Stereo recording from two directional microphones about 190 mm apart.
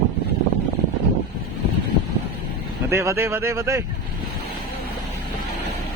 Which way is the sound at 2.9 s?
15° right (ahead or behind).